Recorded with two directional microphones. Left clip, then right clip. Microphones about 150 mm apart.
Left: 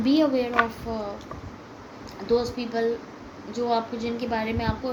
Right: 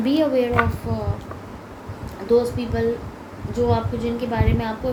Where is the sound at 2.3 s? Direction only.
55° left (ahead or behind).